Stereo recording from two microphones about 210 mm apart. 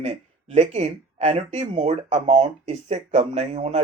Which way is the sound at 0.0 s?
30° right (ahead or behind).